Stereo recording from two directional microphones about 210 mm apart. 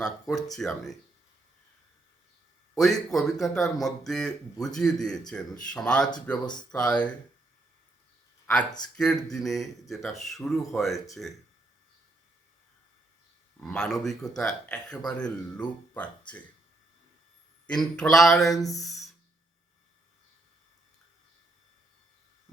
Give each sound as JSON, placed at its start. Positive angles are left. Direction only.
{"t": 0.0, "sound": "speech", "side_deg": 5}
{"t": 2.7, "sound": "speech", "side_deg": 0}
{"t": 9.3, "sound": "speech", "side_deg": 0}
{"t": 13.6, "sound": "speech", "side_deg": 5}
{"t": 17.7, "sound": "speech", "side_deg": 5}
{"t": 18.5, "sound": "a sound", "side_deg": 15}
{"t": 18.8, "sound": "a sound", "side_deg": 0}